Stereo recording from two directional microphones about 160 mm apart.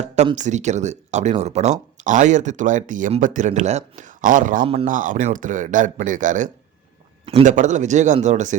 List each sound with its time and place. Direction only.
0.3 s speech: 50° right (ahead or behind)
4.6 s speech: 35° right (ahead or behind)
4.9 s speech: 55° right (ahead or behind)